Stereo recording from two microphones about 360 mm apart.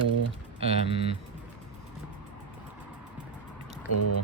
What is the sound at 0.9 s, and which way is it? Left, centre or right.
Speech, centre.